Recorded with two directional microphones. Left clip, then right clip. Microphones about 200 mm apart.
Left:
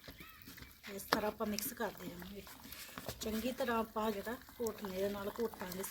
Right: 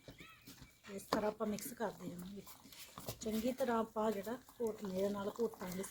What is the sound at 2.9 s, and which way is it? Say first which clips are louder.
Speech: left 1 dB; 20° left (ahead or behind).